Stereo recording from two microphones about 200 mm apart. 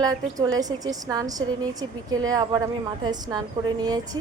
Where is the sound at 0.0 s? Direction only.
20° right (ahead or behind).